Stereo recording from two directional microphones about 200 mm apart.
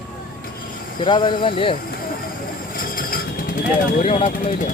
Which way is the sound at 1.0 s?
25° left (ahead or behind).